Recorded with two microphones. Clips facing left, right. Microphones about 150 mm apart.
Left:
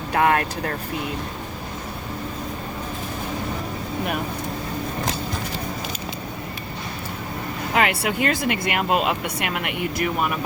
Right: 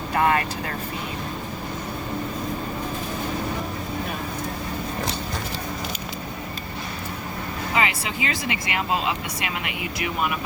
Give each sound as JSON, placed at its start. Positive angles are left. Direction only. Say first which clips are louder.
{"t": 0.1, "sound": "speech", "louder": "left 2 dB", "side_deg": 55}
{"t": 7.7, "sound": "speech", "louder": "left 4 dB", "side_deg": 60}